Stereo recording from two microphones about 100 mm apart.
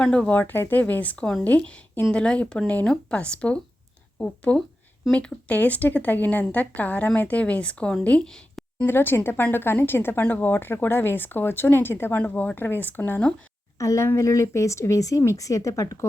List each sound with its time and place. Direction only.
0.0 s a woman's voice: 10° left (ahead or behind)
8.9 s speech: 20° left (ahead or behind)
13.7 s speech: 30° left (ahead or behind)